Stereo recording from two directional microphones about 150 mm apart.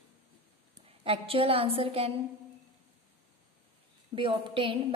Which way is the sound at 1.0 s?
40° right (ahead or behind).